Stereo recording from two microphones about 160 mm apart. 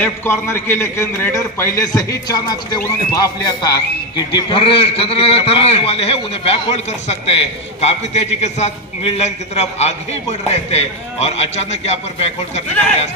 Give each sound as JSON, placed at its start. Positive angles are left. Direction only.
{"t": 0.0, "sound": "a man's voice", "side_deg": 15}